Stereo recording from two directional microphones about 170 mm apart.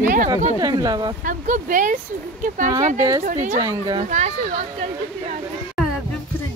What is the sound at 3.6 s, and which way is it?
Speech, 25° right (ahead or behind).